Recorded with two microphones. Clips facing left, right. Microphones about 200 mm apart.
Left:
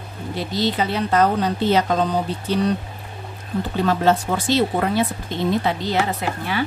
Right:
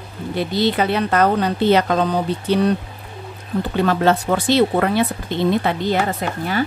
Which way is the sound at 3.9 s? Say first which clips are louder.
Right 1 dB; 65° right (ahead or behind).